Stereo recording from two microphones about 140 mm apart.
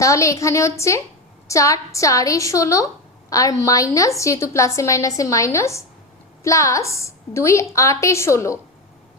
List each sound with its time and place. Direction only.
0.0 s a woman's voice: 20° left (ahead or behind)